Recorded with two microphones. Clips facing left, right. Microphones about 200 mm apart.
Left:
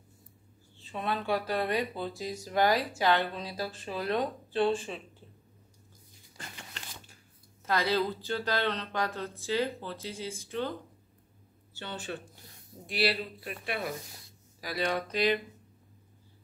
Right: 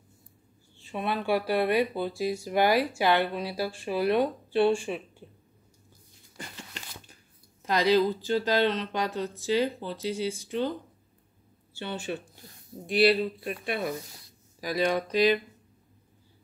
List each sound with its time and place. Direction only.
0.7 s speech: 10° right (ahead or behind)
6.3 s a sound: 15° right (ahead or behind)
7.6 s speech: 15° right (ahead or behind)
11.8 s speech: 15° right (ahead or behind)